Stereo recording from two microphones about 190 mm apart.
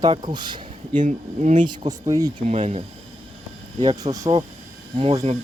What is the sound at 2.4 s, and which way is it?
Speech, 35° right (ahead or behind).